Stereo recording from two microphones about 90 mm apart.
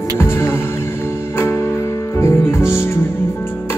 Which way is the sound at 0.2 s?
30° left (ahead or behind).